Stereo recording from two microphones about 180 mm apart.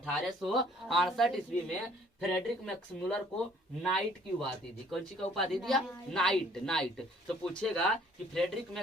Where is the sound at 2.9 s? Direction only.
10° left (ahead or behind).